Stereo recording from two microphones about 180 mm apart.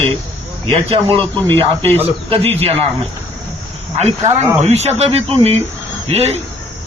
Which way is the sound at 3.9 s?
35° right (ahead or behind).